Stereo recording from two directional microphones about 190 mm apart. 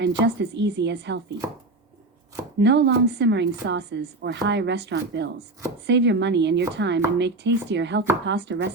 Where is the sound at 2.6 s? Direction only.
65° right (ahead or behind).